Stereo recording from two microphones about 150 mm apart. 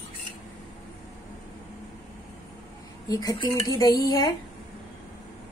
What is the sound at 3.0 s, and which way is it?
A woman's voice, 25° left (ahead or behind).